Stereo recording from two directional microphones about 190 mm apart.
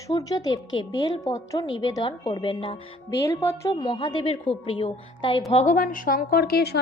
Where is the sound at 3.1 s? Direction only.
15° left (ahead or behind).